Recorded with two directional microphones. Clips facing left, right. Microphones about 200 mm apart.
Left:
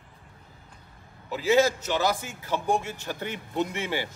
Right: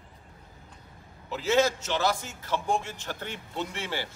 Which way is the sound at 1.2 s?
10° left (ahead or behind).